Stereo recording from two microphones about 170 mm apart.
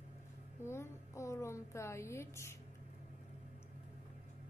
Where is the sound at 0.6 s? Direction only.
15° left (ahead or behind).